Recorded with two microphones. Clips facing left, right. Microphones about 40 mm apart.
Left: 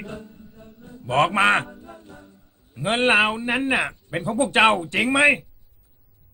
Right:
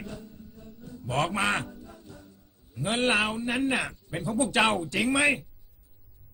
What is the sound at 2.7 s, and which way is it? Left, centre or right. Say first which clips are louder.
A man's voice: left 7 dB; left.